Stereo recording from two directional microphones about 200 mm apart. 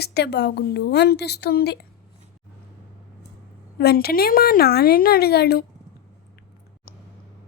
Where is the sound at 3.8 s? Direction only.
50° left (ahead or behind).